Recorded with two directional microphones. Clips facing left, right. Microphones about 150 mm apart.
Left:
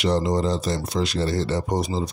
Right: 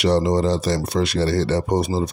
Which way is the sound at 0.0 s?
70° right (ahead or behind).